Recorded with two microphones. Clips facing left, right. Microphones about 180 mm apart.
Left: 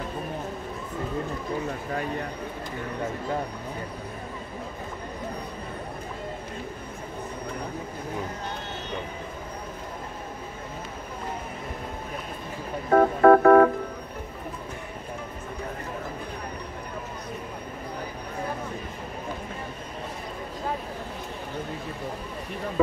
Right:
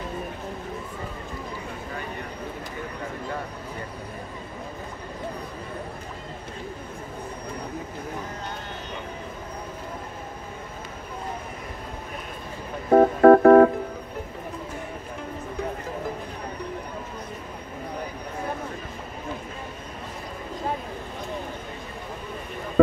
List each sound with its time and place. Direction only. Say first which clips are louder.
12.9 s music: right 3 dB; 35° right (ahead or behind)